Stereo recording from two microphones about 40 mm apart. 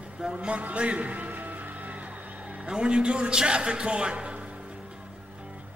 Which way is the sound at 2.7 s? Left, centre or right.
Right.